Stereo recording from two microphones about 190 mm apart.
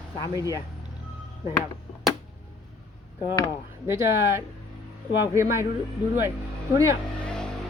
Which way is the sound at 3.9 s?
15° right (ahead or behind).